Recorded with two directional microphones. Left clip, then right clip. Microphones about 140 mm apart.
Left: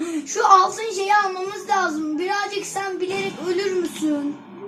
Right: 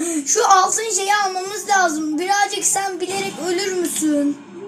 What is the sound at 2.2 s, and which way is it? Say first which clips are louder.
Speech: right 7 dB; 90° right.